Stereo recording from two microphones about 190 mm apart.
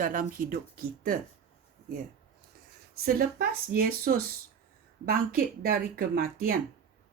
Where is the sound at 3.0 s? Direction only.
50° right (ahead or behind).